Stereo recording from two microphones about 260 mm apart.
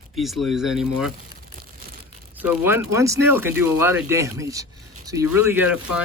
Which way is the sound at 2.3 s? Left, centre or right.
Centre.